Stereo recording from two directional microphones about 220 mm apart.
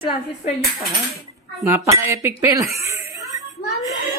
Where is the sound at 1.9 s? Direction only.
15° right (ahead or behind).